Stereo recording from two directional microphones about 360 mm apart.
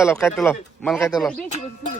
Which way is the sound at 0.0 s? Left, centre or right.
Centre.